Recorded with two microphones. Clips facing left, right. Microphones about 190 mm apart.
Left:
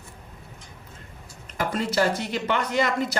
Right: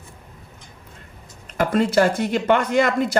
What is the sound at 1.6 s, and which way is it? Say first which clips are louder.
Speech: right 6 dB; 55° right (ahead or behind).